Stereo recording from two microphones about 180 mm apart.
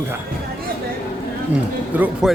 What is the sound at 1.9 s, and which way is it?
Speech, 10° right (ahead or behind).